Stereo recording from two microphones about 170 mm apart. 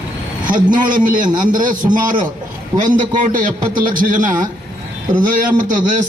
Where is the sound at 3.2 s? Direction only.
50° right (ahead or behind).